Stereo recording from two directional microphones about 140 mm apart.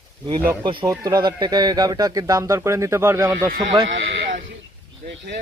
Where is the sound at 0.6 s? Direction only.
35° right (ahead or behind); by 3.3 s 20° right (ahead or behind).